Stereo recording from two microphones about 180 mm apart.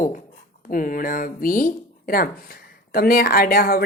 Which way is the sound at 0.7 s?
50° left (ahead or behind).